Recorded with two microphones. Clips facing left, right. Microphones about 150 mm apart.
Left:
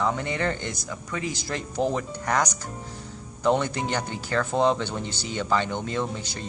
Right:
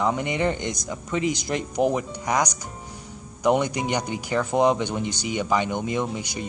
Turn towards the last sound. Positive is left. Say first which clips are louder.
# right 2 dB
turn(degrees=-15)  # may be behind; listen again after turning